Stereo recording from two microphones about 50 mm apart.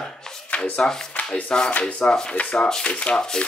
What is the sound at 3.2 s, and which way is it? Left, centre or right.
Speech, centre.